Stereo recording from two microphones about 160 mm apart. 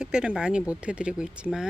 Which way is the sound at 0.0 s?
5° right (ahead or behind).